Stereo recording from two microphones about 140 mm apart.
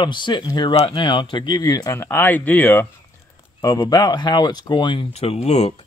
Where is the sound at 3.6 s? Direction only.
25° left (ahead or behind); by 5.8 s 50° left (ahead or behind).